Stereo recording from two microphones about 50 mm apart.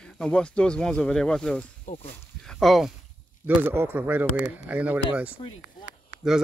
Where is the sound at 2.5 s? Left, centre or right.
Centre.